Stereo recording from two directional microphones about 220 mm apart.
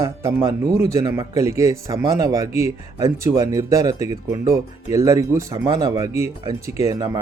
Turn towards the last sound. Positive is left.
turn(degrees=-15)  # may be behind; listen again after turning